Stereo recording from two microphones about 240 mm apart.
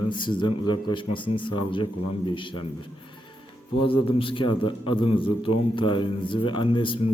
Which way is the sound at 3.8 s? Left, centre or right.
Left.